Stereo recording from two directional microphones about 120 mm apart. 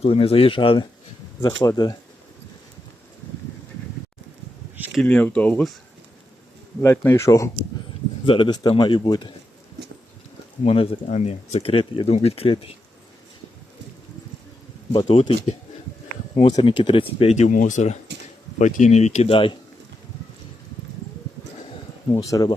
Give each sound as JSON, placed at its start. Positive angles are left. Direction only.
{"t": 0.0, "sound": "speech", "side_deg": 50}
{"t": 1.4, "sound": "speech", "side_deg": 25}
{"t": 5.0, "sound": "speech", "side_deg": 10}
{"t": 6.8, "sound": "speech", "side_deg": 20}
{"t": 8.3, "sound": "speech", "side_deg": 40}
{"t": 10.6, "sound": "speech", "side_deg": 55}
{"t": 15.0, "sound": "speech", "side_deg": 70}
{"t": 16.5, "sound": "speech", "side_deg": 35}
{"t": 17.3, "sound": "speech", "side_deg": 80}
{"t": 18.6, "sound": "speech", "side_deg": 80}
{"t": 19.3, "sound": "speech", "side_deg": 45}
{"t": 22.1, "sound": "speech", "side_deg": 25}